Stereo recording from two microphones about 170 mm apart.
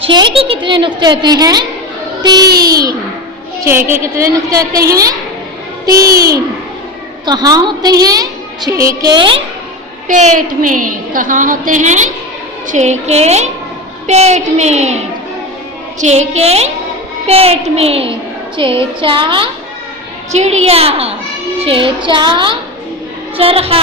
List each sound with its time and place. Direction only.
0.0 s a woman's voice: 30° right (ahead or behind)
10.1 s a woman's voice: 45° right (ahead or behind)
16.0 s a woman's voice: 40° right (ahead or behind)
20.3 s a woman's voice: 40° right (ahead or behind)